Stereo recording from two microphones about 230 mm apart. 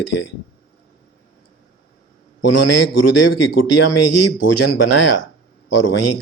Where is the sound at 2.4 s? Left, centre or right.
Left.